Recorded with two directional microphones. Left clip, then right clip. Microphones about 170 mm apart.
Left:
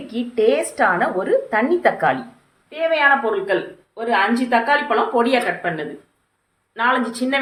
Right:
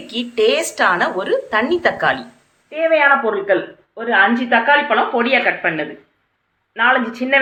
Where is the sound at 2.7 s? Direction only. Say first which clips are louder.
Right 3 dB; 20° right (ahead or behind).